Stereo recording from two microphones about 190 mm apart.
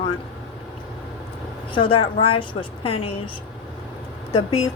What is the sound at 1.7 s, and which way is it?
A woman's voice, 25° left (ahead or behind).